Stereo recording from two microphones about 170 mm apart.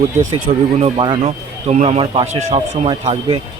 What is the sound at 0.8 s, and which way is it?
A man's voice, 30° right (ahead or behind).